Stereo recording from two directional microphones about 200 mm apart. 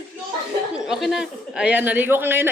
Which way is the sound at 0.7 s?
Centre (ahead or behind).